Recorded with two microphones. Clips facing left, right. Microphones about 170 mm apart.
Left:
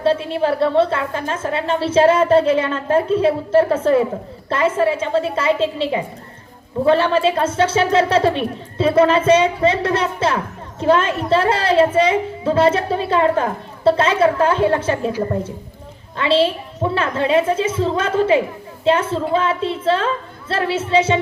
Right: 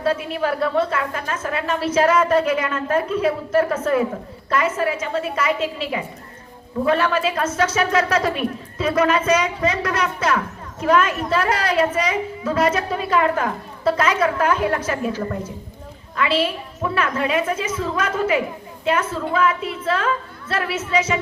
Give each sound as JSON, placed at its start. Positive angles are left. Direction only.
{"t": 0.0, "sound": "speech", "side_deg": 30}
{"t": 16.1, "sound": "speech", "side_deg": 30}